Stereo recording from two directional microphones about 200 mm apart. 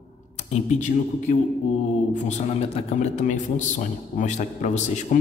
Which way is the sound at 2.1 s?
35° left (ahead or behind).